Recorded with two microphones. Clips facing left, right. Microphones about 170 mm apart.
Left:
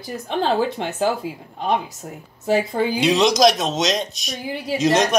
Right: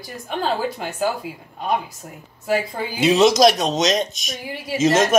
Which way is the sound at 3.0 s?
Centre (ahead or behind).